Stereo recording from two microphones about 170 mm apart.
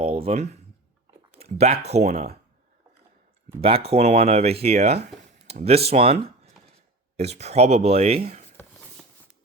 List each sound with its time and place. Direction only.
0.0 s speech: 35° right (ahead or behind)
3.8 s speech: 35° right (ahead or behind)